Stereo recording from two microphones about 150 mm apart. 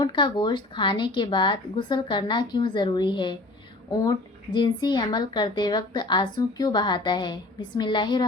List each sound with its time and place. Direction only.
0.0 s speech: 30° left (ahead or behind)
4.5 s a woman's voice: 30° left (ahead or behind)